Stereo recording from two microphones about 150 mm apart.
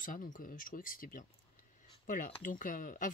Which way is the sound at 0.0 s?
60° left (ahead or behind).